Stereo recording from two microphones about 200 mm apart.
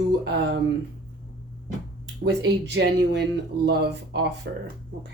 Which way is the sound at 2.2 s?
55° right (ahead or behind).